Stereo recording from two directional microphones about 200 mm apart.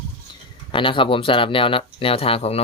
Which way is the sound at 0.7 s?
25° left (ahead or behind).